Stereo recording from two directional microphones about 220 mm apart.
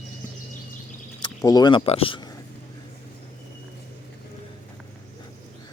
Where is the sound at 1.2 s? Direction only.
20° left (ahead or behind).